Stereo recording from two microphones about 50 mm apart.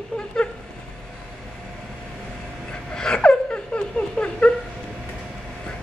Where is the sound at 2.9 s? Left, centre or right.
Centre.